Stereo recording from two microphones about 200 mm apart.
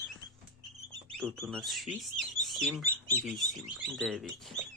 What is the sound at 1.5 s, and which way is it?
Speech, centre (ahead or behind).